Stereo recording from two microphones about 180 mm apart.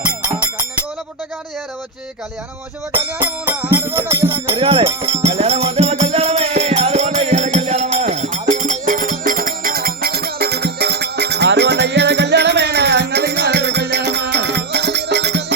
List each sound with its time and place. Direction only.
3.2 s music: 10° right (ahead or behind)
4.5 s music: 30° right (ahead or behind); by 15.5 s 70° right (ahead or behind)